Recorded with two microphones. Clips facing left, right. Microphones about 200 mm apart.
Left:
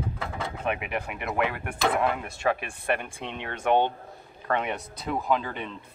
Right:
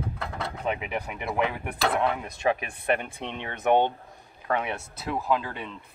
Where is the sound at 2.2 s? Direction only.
15° right (ahead or behind).